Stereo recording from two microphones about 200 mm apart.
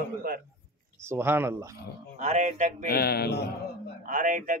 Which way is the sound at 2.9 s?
50° left (ahead or behind).